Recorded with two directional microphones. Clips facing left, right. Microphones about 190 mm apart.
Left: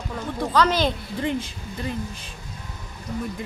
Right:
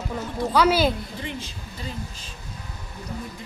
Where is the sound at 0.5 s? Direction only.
10° right (ahead or behind).